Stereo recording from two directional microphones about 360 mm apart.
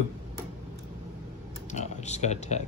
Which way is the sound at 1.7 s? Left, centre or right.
Centre.